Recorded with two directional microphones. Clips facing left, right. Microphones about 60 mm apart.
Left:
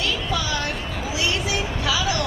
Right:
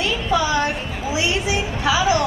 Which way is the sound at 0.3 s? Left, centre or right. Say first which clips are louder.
Right 6 dB; right.